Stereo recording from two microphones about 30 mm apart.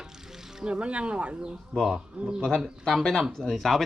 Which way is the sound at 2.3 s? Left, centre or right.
Centre.